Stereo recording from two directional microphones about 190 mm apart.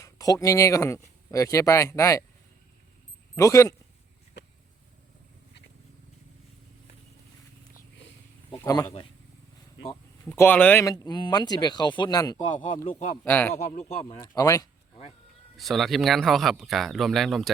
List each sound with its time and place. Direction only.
0.0 s speech: 15° left (ahead or behind)
3.3 s speech: 15° left (ahead or behind)
8.4 s speech: 20° left (ahead or behind)
9.9 s speech: 15° left (ahead or behind)
13.2 s speech: 10° left (ahead or behind)
13.7 s speech: 40° left (ahead or behind)
14.0 s speech: 20° left (ahead or behind)
15.5 s speech: centre (ahead or behind)